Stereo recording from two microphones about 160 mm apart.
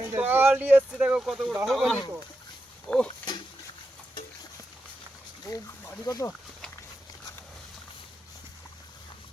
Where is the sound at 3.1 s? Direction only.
30° left (ahead or behind).